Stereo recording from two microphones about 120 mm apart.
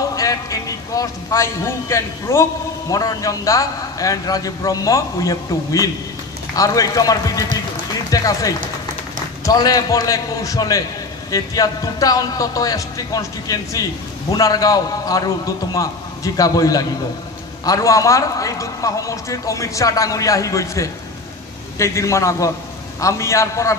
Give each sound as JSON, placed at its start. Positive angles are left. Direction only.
{"t": 0.1, "sound": "a man's voice", "side_deg": 30}